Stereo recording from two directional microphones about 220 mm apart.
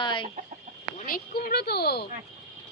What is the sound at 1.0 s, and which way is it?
Speech, 40° left (ahead or behind).